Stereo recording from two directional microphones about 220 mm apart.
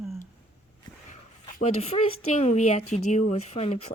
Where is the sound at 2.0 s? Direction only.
75° left (ahead or behind).